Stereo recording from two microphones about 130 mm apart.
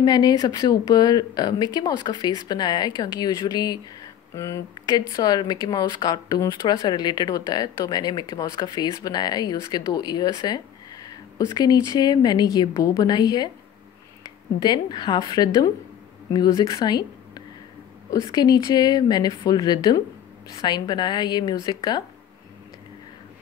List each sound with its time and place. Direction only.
0.0 s speech: 30° left (ahead or behind)
14.6 s a woman's voice: 35° left (ahead or behind)